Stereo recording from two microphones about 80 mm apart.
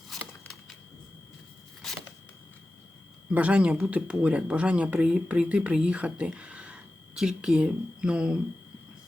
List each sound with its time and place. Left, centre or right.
3.3 s speech: centre